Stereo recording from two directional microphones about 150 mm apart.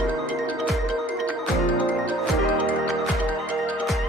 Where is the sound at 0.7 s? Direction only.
Centre (ahead or behind).